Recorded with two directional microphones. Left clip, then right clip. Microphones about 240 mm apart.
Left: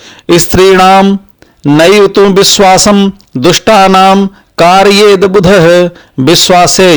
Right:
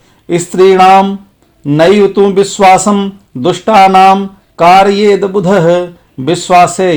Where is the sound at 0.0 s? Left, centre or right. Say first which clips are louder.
Left 7 dB; left.